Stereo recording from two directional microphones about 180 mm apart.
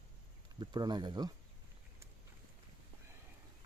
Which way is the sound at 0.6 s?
25° right (ahead or behind).